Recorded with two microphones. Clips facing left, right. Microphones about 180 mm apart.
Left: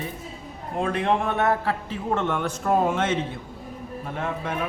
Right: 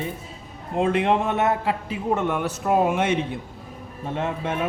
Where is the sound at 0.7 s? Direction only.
20° right (ahead or behind).